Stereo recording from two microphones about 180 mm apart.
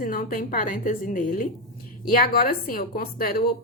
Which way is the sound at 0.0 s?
50° left (ahead or behind).